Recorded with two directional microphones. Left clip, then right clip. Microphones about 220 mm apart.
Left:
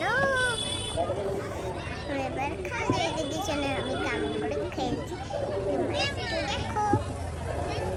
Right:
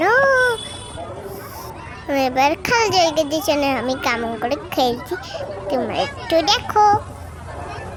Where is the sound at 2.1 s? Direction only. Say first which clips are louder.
Right 15 dB; 45° right (ahead or behind).